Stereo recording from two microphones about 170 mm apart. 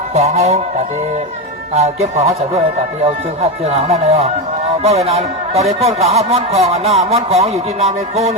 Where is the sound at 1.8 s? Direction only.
40° right (ahead or behind).